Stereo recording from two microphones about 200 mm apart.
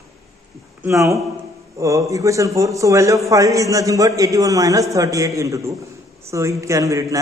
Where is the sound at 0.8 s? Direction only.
15° right (ahead or behind).